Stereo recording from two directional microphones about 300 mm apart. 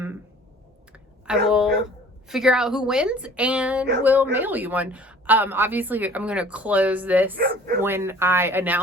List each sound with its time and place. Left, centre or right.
0.9 s a sound: centre
2.2 s a woman's voice: centre
7.3 s speech: right
7.8 s speech: centre